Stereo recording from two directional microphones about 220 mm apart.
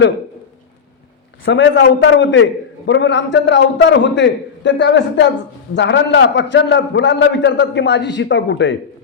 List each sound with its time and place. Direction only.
1.5 s a man's voice: 55° left (ahead or behind)